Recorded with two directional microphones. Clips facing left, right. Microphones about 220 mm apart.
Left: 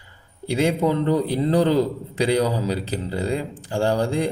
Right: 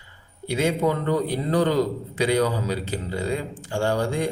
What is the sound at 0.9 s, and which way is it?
Speech, 30° left (ahead or behind).